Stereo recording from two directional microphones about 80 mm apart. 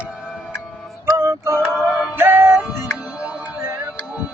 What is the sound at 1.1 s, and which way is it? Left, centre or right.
Music, right.